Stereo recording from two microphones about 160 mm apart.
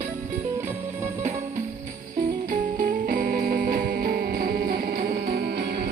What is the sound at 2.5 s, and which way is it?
Music, 55° right (ahead or behind).